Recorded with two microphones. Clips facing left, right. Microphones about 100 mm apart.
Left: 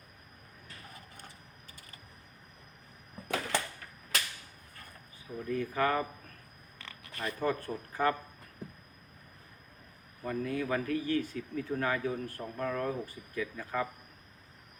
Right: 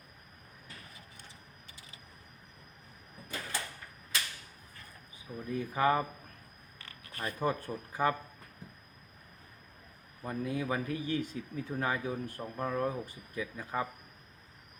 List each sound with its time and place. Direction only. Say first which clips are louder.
0.9 s vehicle: left 3 dB; 50° left (ahead or behind)
3.2 s a sound: left 7 dB; 65° left (ahead or behind)
5.5 s speech: right 1 dB; 15° right (ahead or behind)
7.2 s speech: left 1 dB; 15° right (ahead or behind)
10.2 s speech: left 1 dB; 20° right (ahead or behind)